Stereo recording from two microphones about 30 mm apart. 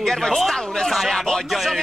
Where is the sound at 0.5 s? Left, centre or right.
Centre.